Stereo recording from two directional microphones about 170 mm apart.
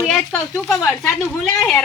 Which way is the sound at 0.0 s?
5° left (ahead or behind).